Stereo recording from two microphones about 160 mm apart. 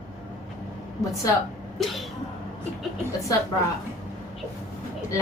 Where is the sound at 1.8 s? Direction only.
Centre (ahead or behind).